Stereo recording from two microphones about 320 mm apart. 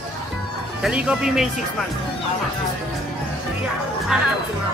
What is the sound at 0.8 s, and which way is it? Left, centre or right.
Speech, centre.